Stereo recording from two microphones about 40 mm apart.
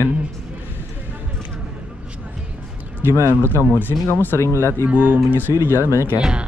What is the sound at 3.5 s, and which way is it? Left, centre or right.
Speech, left.